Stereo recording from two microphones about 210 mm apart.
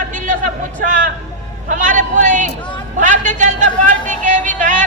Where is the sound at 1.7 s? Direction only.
35° right (ahead or behind).